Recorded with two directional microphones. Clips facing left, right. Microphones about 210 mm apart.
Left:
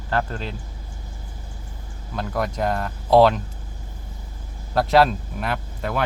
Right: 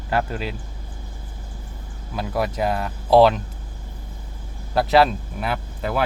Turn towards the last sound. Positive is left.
turn(degrees=-5)  # may be behind; listen again after turning